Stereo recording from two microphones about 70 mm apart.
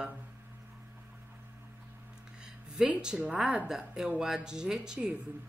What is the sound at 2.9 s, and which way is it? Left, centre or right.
Speech, centre.